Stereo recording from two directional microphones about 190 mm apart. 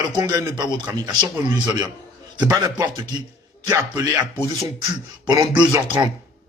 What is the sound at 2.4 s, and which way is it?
Music, 15° right (ahead or behind).